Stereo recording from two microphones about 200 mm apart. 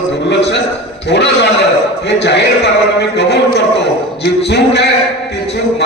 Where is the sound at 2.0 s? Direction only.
55° left (ahead or behind).